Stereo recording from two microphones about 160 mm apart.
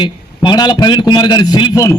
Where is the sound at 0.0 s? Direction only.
25° left (ahead or behind).